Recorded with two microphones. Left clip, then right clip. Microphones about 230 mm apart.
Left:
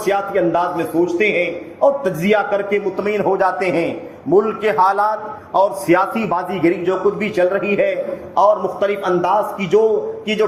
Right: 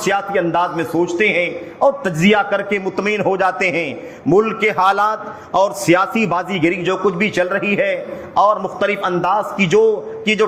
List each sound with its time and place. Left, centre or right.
0.1 s a man's voice: right